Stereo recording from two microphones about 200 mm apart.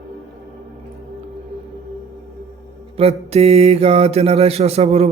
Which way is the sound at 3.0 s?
30° right (ahead or behind).